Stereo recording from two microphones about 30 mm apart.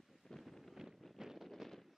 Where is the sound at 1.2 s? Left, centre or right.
Centre.